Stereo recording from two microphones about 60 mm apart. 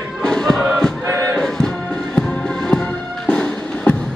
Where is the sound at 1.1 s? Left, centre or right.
Right.